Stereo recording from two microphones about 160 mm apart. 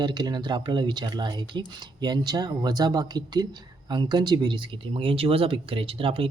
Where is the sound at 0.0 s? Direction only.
25° right (ahead or behind).